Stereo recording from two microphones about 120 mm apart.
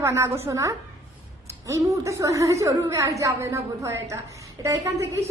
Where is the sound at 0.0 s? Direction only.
20° right (ahead or behind).